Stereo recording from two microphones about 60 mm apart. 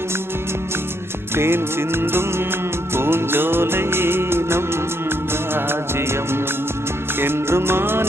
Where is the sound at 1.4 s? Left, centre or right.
Right.